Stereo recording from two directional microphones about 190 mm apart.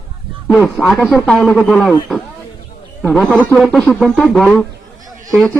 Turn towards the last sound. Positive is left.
turn(degrees=0)  # may be behind; listen again after turning